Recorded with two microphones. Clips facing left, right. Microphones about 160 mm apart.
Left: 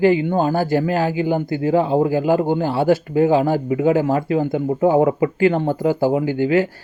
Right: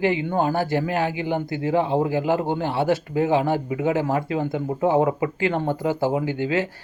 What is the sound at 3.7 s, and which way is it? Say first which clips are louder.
Speech: left 5 dB; 35° left (ahead or behind).